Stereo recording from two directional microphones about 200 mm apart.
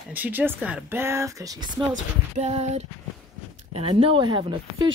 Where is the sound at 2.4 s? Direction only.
35° right (ahead or behind).